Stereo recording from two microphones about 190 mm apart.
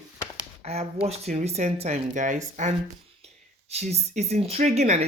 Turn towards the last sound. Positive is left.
turn(degrees=-35)  # may be behind; listen again after turning